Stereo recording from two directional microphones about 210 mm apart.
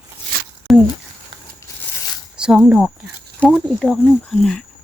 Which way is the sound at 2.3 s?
5° right (ahead or behind).